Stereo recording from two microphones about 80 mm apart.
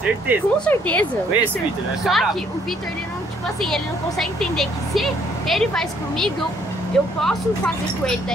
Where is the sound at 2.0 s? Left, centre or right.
Centre.